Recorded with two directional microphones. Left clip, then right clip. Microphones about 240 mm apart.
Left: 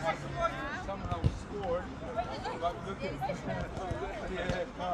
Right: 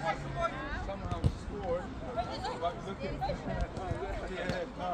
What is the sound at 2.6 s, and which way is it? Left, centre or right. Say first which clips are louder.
Speech: left 2 dB; centre.